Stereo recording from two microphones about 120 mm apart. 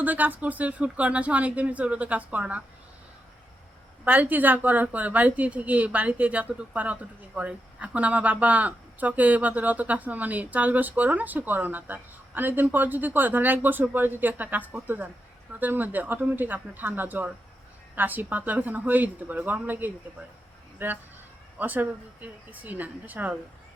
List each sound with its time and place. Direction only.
0.0 s a woman's voice: 15° right (ahead or behind)
4.0 s a woman's voice: 15° right (ahead or behind)